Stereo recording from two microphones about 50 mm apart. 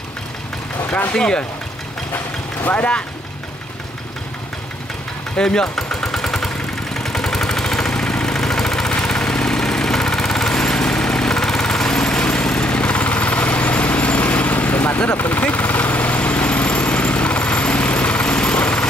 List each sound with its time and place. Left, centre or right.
0.8 s a sound: left
1.1 s speech: centre
5.4 s vehicle: centre